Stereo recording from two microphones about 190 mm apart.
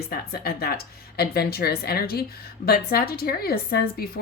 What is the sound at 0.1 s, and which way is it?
A woman's voice, 55° left (ahead or behind).